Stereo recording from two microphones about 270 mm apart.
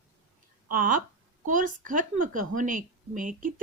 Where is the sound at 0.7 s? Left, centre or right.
Right.